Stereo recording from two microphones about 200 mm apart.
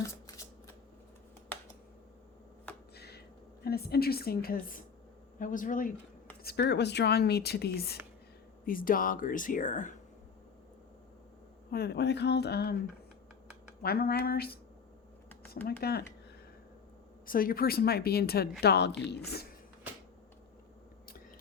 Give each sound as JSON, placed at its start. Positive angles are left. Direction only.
{"t": 2.9, "sound": "a sound", "side_deg": 55}
{"t": 5.4, "sound": "speech", "side_deg": 40}
{"t": 6.4, "sound": "speech", "side_deg": 55}
{"t": 11.7, "sound": "speech", "side_deg": 55}
{"t": 13.8, "sound": "speech", "side_deg": 50}
{"t": 15.8, "sound": "speech", "side_deg": 50}
{"t": 17.2, "sound": "speech", "side_deg": 45}